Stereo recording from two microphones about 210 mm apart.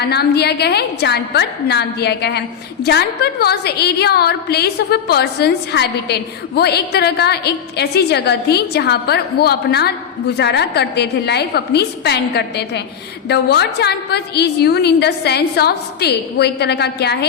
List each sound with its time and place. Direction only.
0.0 s a woman's voice: 50° left (ahead or behind)